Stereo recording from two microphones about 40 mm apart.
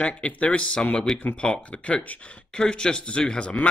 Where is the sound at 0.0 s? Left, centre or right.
Left.